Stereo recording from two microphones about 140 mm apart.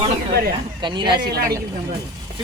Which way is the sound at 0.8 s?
35° right (ahead or behind).